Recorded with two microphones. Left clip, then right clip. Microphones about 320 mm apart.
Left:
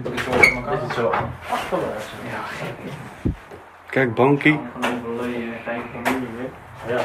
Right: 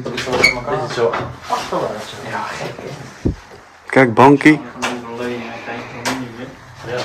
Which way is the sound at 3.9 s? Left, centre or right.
Right.